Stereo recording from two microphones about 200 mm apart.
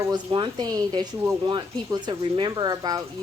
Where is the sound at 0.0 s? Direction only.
20° right (ahead or behind).